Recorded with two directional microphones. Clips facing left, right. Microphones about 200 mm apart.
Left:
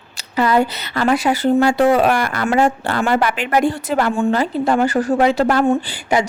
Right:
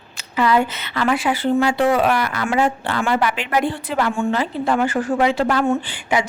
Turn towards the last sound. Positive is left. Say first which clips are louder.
# left 3 dB
turn(degrees=40)  # may be behind; listen again after turning